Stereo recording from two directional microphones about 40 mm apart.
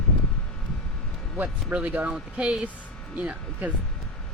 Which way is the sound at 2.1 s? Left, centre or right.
Right.